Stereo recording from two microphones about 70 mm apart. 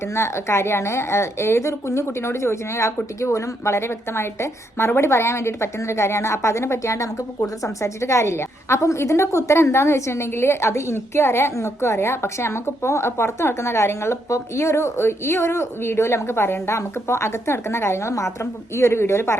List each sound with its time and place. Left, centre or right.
0.1 s a woman's voice: left